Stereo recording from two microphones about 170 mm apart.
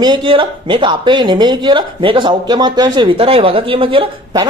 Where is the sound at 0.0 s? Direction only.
25° right (ahead or behind).